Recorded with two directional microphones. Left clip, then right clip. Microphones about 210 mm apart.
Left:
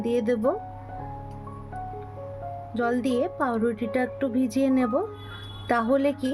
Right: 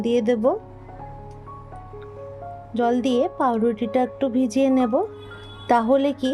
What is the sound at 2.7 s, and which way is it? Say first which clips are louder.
Speech: right 5 dB; 25° right (ahead or behind).